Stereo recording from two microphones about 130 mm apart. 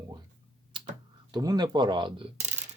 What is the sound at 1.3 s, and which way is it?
Speech, 30° right (ahead or behind).